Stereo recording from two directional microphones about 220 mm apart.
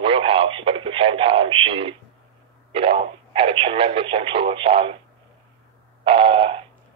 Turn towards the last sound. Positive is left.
turn(degrees=-25)  # may be behind; listen again after turning